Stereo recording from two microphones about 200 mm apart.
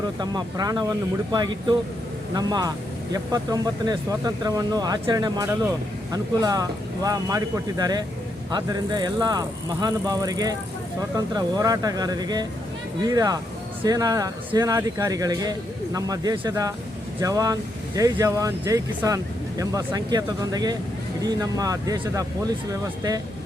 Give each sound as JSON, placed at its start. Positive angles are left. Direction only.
{"t": 0.2, "sound": "speech", "side_deg": -20}